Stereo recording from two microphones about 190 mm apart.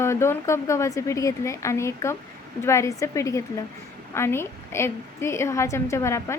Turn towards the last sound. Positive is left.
turn(degrees=15)  # may be behind; listen again after turning